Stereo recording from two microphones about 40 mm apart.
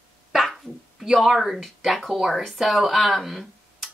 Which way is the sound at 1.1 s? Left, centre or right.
Centre.